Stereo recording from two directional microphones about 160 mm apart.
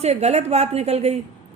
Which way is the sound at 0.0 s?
40° right (ahead or behind).